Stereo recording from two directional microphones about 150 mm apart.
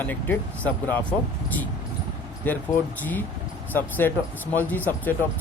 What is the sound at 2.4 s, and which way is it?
Speech, 15° left (ahead or behind).